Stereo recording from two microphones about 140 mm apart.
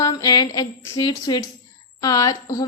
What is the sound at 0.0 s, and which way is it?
Speech, 25° left (ahead or behind).